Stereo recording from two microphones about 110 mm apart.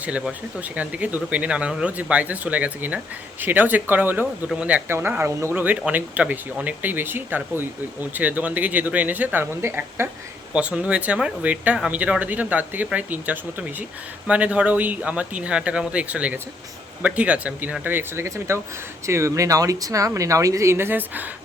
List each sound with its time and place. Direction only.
0.0 s speech: 10° right (ahead or behind)
10.5 s speech: 10° right (ahead or behind)